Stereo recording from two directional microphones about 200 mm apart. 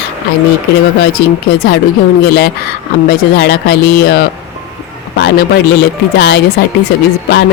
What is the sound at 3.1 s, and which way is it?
Speech, 55° left (ahead or behind).